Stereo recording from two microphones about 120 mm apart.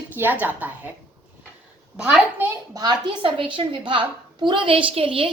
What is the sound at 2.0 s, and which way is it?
Speech, 10° right (ahead or behind).